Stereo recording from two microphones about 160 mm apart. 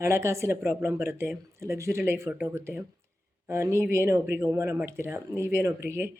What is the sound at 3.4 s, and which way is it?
Speech, 15° right (ahead or behind).